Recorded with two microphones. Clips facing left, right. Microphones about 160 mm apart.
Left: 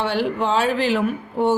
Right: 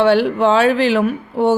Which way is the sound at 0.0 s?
80° right.